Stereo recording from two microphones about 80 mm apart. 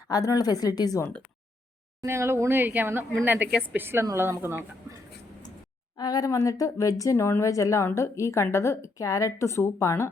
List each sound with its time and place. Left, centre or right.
0.1 s speech: left
2.0 s speech: right
6.0 s a woman's voice: left